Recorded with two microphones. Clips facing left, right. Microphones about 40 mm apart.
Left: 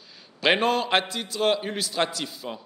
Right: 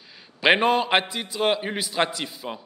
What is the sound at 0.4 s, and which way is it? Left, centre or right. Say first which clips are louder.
A man's voice: right 3 dB; centre.